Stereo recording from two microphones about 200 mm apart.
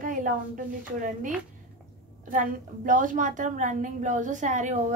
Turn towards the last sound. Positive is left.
turn(degrees=-40)  # may be behind; listen again after turning